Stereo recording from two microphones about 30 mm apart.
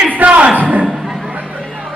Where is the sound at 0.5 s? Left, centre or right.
Right.